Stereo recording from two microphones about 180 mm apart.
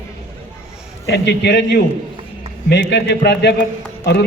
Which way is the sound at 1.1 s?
65° left (ahead or behind).